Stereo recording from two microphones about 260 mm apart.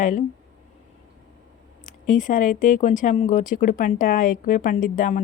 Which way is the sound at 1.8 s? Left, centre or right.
Left.